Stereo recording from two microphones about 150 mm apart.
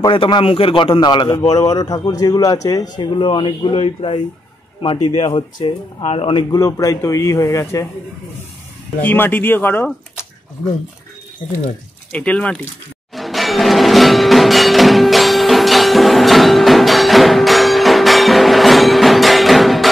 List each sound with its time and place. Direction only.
0.0 s a man's voice: 30° left (ahead or behind)
5.2 s a man's voice: 30° left (ahead or behind)
6.5 s a man's voice: 25° left (ahead or behind)
9.0 s speech: 10° left (ahead or behind)
12.1 s speech: 10° left (ahead or behind)
13.1 s music: centre (ahead or behind)